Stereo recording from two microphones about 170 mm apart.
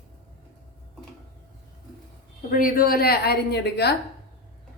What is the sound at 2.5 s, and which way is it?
A woman's voice, 55° left (ahead or behind).